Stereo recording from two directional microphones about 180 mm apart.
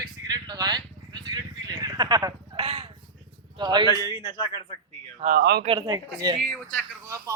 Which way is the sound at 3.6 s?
25° right (ahead or behind).